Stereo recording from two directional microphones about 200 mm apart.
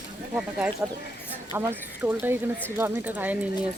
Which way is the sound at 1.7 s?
10° right (ahead or behind).